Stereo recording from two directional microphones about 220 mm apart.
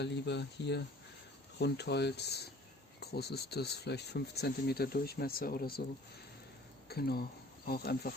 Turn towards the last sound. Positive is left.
turn(degrees=45)  # may be behind; listen again after turning